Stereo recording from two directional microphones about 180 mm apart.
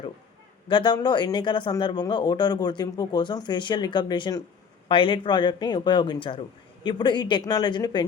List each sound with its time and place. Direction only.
0.7 s speech: 25° left (ahead or behind)